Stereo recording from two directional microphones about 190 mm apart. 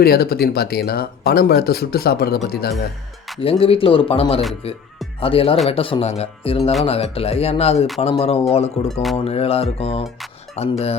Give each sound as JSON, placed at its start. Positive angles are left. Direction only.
{"t": 0.0, "sound": "speech", "side_deg": 55}
{"t": 3.4, "sound": "speech", "side_deg": 30}
{"t": 8.9, "sound": "speech", "side_deg": 0}
{"t": 9.2, "sound": "speech", "side_deg": 30}